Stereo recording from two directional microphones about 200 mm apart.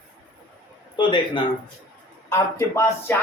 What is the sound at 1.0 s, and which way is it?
Speech, 25° left (ahead or behind).